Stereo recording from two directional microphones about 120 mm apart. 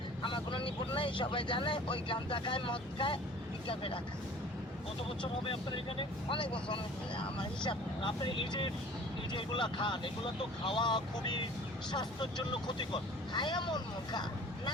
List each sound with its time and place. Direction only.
0.2 s speech: 45° left (ahead or behind)
5.2 s speech: 45° left (ahead or behind)